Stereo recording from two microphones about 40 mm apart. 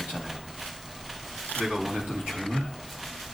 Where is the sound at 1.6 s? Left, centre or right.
Centre.